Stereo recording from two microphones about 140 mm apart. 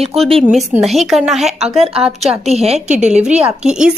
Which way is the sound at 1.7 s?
45° right (ahead or behind).